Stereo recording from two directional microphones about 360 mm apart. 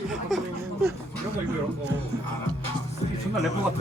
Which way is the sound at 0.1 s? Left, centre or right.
Centre.